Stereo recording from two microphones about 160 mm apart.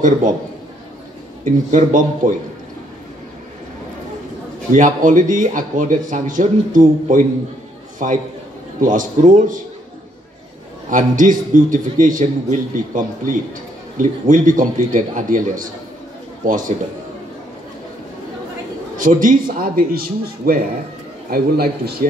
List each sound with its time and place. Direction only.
1.4 s a man's voice: 50° right (ahead or behind)
4.7 s a man's voice: 55° right (ahead or behind)
10.9 s a man's voice: 55° right (ahead or behind)
18.9 s a man's voice: 55° right (ahead or behind); by 21.9 s 70° right (ahead or behind)